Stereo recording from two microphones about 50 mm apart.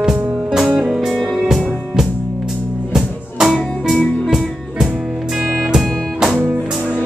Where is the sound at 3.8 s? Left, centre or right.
Centre.